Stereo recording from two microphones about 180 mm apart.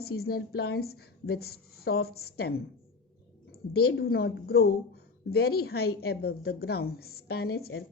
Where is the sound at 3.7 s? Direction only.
60° left (ahead or behind).